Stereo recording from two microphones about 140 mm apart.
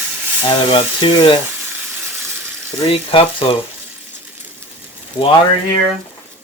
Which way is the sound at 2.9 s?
40° left (ahead or behind).